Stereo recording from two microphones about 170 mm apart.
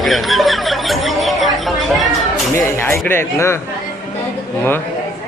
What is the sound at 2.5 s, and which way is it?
Speech, 15° left (ahead or behind).